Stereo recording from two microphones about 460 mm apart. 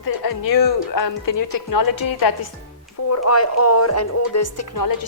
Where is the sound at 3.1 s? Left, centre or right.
Left.